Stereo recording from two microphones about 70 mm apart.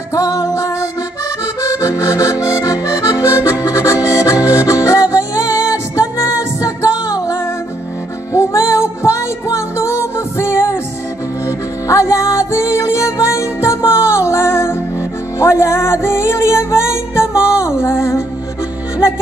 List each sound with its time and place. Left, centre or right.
0.1 s music: left
1.6 s accordion: left
4.6 s music: left